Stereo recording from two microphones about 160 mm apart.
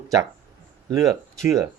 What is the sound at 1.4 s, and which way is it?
Speech, 20° right (ahead or behind).